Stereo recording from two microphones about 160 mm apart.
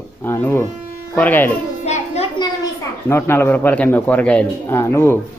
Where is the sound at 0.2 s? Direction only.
15° left (ahead or behind).